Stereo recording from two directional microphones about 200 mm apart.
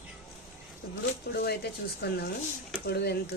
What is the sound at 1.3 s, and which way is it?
Speech, 55° left (ahead or behind).